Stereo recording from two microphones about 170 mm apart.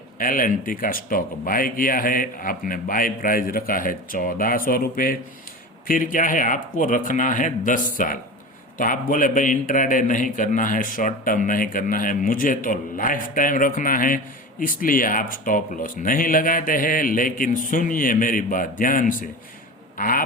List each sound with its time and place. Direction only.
0.2 s a man's voice: 55° left (ahead or behind)